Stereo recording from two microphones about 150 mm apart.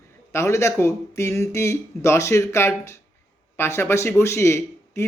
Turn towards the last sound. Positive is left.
turn(degrees=20)  # may be behind; listen again after turning